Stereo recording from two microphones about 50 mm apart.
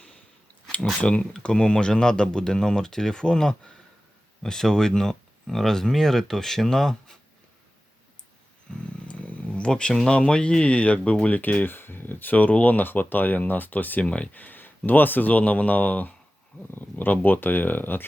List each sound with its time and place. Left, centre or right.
1.0 s speech: left
9.0 s a sound: left
10.1 s speech: centre; by 14.0 s left
14.0 s speech: left
14.3 s speech: left